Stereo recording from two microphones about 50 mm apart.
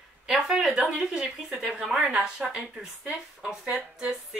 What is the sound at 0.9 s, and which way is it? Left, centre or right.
Speech, right.